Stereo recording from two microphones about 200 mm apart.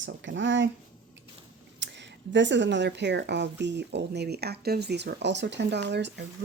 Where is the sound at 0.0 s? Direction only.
65° right (ahead or behind).